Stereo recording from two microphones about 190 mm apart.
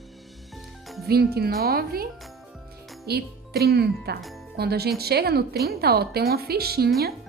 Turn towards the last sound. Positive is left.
turn(degrees=-55)  # may be behind; listen again after turning